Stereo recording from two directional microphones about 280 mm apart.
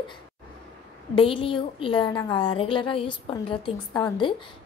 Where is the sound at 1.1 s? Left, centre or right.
Centre.